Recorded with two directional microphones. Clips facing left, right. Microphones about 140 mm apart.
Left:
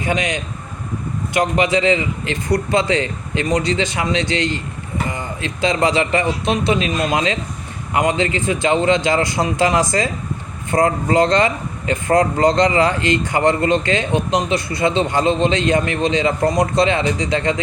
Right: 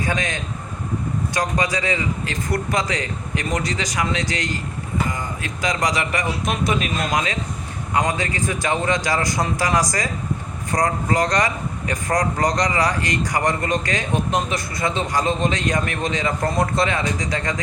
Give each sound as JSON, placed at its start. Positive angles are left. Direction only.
{"t": 0.0, "sound": "speech", "side_deg": 20}